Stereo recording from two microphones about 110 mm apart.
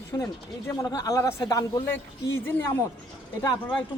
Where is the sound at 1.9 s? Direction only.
20° left (ahead or behind).